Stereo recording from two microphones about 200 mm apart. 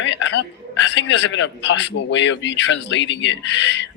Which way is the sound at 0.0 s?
65° left (ahead or behind).